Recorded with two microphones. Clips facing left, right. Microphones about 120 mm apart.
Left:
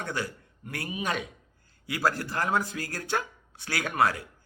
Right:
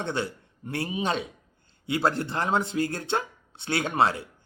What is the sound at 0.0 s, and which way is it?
Speech, 25° right (ahead or behind).